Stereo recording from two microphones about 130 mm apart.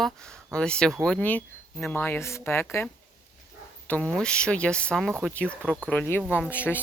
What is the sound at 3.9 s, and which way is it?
Speech, 5° left (ahead or behind).